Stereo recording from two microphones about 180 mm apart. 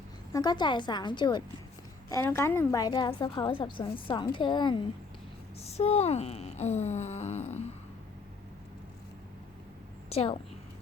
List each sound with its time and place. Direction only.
0.3 s a woman's voice: 25° left (ahead or behind)
10.1 s a woman's voice: 30° left (ahead or behind)